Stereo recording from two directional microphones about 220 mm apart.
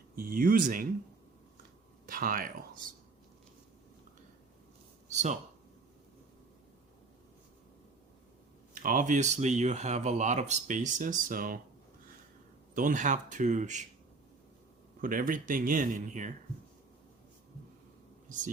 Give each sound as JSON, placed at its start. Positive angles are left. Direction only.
{"t": 0.2, "sound": "speech", "side_deg": -40}
{"t": 2.0, "sound": "speech", "side_deg": -40}
{"t": 5.1, "sound": "speech", "side_deg": -30}
{"t": 8.7, "sound": "speech", "side_deg": -40}
{"t": 12.7, "sound": "speech", "side_deg": -35}
{"t": 15.0, "sound": "speech", "side_deg": -40}